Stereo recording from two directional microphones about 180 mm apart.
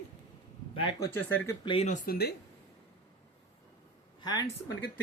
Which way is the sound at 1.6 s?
35° left (ahead or behind).